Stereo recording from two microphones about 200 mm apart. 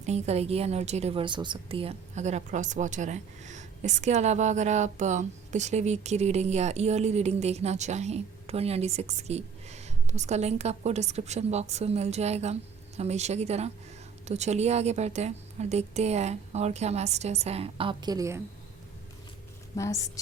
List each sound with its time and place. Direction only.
0.0 s a woman's voice: 35° right (ahead or behind); by 18.4 s 15° right (ahead or behind)
19.7 s a woman's voice: 15° left (ahead or behind)